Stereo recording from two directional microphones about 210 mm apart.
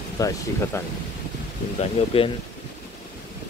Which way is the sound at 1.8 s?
30° left (ahead or behind).